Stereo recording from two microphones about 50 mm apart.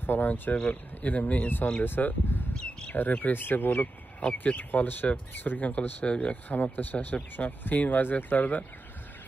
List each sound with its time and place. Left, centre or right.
0.0 s speech: left
0.7 s speech: left
6.0 s speech: left
6.5 s speech: left